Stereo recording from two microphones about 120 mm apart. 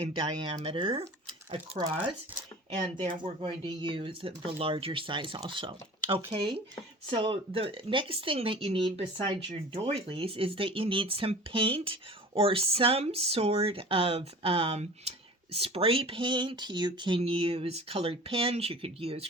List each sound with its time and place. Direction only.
0.6 s speech: 50° right (ahead or behind)
1.8 s speech: 40° right (ahead or behind)
17.2 s speech: 55° right (ahead or behind)